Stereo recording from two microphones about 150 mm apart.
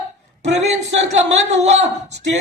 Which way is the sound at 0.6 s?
45° right (ahead or behind).